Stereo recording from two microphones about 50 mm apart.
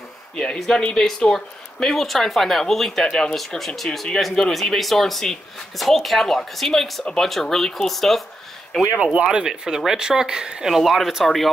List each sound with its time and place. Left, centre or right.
0.6 s speech: centre
3.1 s speech: centre
3.3 s speech: centre
9.0 s speech: centre